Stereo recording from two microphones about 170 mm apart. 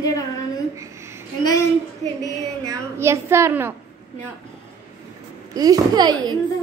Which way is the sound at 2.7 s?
15° right (ahead or behind).